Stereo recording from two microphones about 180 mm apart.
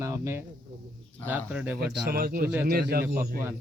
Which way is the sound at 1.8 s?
55° right (ahead or behind).